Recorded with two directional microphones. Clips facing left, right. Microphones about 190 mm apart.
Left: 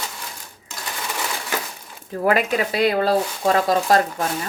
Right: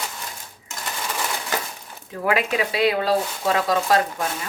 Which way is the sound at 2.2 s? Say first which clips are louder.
Left 3 dB; 45° left (ahead or behind).